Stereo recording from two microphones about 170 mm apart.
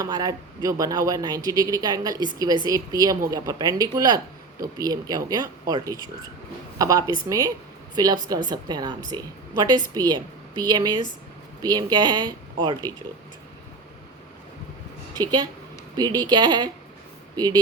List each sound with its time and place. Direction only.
0.0 s speech: 20° right (ahead or behind)
15.2 s speech: 25° right (ahead or behind)